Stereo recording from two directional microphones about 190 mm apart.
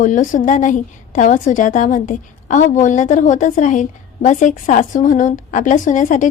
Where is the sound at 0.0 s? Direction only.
40° left (ahead or behind).